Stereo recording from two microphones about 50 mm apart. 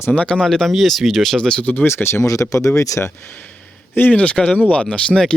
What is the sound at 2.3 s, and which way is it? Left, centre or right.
Speech, left.